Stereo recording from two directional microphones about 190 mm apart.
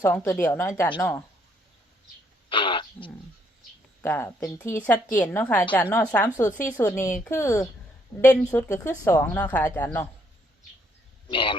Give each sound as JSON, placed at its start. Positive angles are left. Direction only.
{"t": 0.0, "sound": "a woman's voice", "side_deg": 10}
{"t": 2.5, "sound": "throat clearing", "side_deg": 25}
{"t": 4.0, "sound": "a woman's voice", "side_deg": 15}
{"t": 11.3, "sound": "speech", "side_deg": 25}